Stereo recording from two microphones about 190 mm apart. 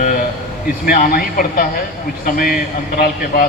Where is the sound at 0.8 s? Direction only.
50° left (ahead or behind).